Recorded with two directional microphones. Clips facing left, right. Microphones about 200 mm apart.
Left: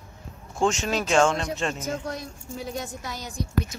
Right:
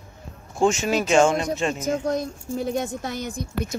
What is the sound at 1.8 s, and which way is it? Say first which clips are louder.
Speech: right 7 dB; 45° right (ahead or behind).